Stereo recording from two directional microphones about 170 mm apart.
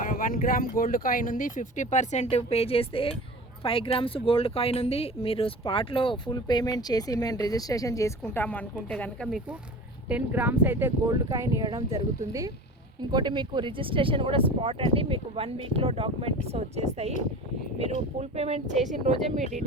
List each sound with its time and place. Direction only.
0.0 s speech: 55° left (ahead or behind); by 19.6 s 45° right (ahead or behind)